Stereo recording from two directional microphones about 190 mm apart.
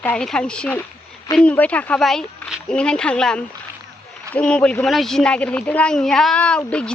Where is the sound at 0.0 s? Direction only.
5° left (ahead or behind).